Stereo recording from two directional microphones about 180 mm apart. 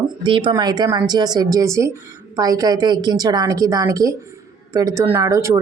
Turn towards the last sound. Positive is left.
turn(degrees=-15)  # may be behind; listen again after turning